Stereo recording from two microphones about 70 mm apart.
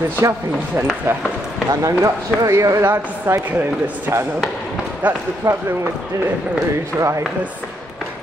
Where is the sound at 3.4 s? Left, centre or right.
Right.